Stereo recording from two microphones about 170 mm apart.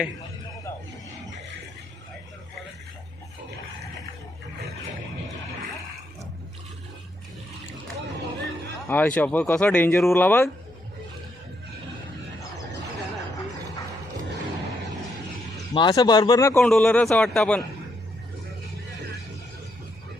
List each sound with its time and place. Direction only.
8.9 s speech: 10° left (ahead or behind)
15.7 s speech: 25° left (ahead or behind)
16.6 s a man's voice: 5° left (ahead or behind)